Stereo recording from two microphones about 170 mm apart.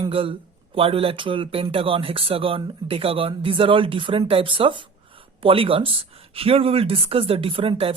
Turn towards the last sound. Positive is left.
turn(degrees=-35)  # may be behind; listen again after turning